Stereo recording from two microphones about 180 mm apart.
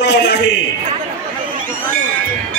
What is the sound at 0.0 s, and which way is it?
Speech, 65° left (ahead or behind).